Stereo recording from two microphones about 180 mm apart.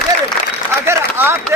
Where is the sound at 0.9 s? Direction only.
15° right (ahead or behind).